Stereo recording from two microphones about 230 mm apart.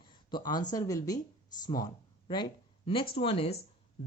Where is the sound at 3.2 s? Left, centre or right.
Left.